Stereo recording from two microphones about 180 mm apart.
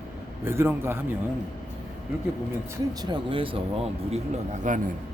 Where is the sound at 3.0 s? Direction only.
25° right (ahead or behind).